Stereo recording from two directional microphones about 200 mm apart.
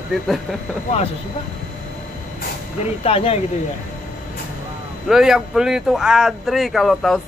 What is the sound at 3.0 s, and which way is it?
Speech, 30° left (ahead or behind).